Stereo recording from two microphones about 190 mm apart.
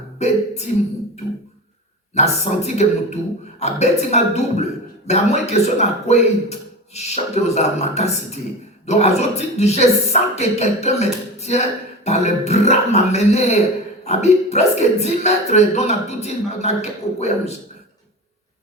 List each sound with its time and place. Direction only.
2.1 s a man's voice: 35° left (ahead or behind)